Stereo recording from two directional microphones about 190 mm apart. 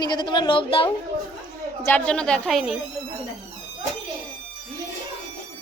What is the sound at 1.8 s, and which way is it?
Speech, 5° left (ahead or behind).